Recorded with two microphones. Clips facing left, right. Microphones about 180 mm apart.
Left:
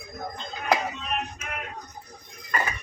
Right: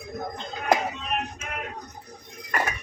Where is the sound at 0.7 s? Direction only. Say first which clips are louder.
Right 2 dB; 45° right (ahead or behind).